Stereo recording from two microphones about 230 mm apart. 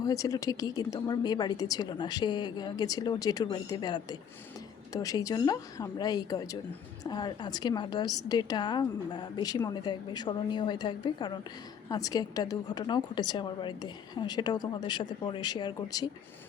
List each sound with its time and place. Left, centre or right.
0.0 s a woman's voice: centre